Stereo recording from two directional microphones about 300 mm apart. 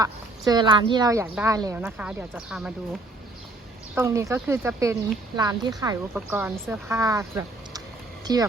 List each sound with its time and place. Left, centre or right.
0.0 s speech: centre
3.9 s speech: centre